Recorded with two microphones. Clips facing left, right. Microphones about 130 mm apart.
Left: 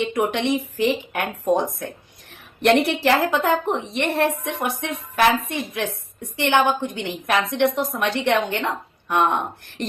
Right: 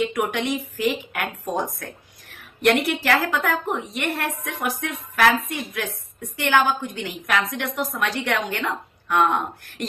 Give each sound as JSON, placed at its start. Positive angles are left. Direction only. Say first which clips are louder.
{"t": 0.0, "sound": "a woman's voice", "louder": "left 2 dB", "side_deg": 25}